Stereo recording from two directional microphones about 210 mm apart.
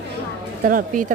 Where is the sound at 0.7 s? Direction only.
40° right (ahead or behind).